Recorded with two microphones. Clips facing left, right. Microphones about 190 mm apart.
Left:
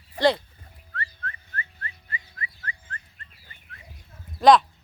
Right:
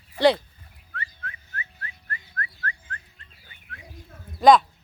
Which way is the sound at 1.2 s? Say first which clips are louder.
Left 2 dB; 5° right (ahead or behind).